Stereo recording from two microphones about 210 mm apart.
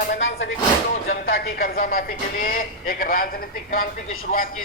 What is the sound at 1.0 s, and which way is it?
Speech, 45° left (ahead or behind).